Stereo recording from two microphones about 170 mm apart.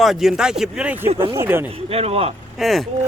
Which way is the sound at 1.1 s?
30° right (ahead or behind).